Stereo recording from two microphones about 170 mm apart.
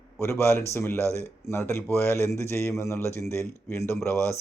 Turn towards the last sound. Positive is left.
turn(degrees=15)  # may be behind; listen again after turning